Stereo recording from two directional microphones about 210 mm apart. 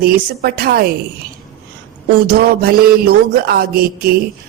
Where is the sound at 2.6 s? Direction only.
45° right (ahead or behind).